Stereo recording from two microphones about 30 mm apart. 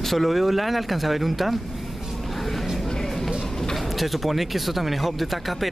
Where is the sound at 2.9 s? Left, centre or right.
Centre.